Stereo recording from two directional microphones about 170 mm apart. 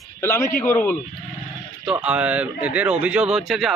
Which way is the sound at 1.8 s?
5° right (ahead or behind).